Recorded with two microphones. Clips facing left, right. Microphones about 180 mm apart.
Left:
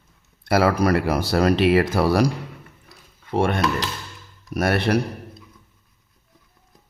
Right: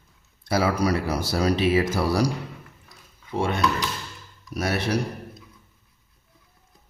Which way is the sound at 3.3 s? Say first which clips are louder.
Left 3 dB; 55° left (ahead or behind).